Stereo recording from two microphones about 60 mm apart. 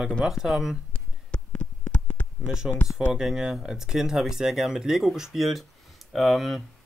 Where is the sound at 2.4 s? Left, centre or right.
Centre.